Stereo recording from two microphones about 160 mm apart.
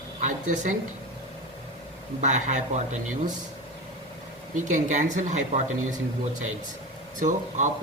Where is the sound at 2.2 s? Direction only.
50° right (ahead or behind).